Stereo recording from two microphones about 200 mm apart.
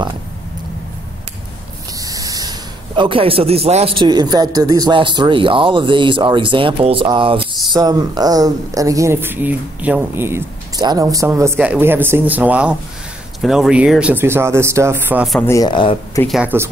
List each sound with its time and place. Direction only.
2.0 s spray: 15° right (ahead or behind)
3.0 s a man's voice: 25° right (ahead or behind); by 15.4 s 5° right (ahead or behind)
15.4 s speech: 15° left (ahead or behind)
16.3 s speech: 5° right (ahead or behind)